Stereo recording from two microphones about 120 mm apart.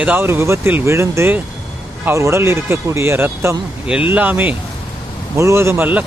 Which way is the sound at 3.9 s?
10° right (ahead or behind).